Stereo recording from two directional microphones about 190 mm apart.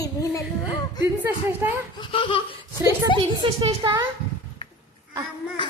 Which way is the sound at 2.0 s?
25° left (ahead or behind).